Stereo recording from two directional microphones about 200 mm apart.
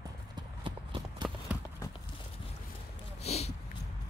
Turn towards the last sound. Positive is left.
turn(degrees=30)  # may be behind; listen again after turning